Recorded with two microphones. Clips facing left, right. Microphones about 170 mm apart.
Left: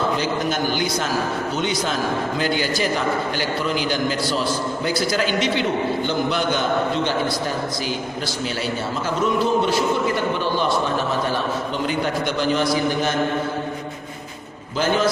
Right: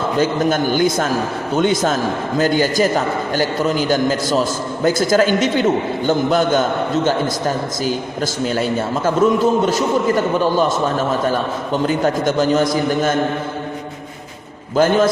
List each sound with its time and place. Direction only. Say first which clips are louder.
0.2 s a man's voice: right 6 dB; 50° right (ahead or behind)
11.9 s a man's voice: right 6 dB; 45° right (ahead or behind)
14.8 s a man's voice: right 6 dB; 50° right (ahead or behind)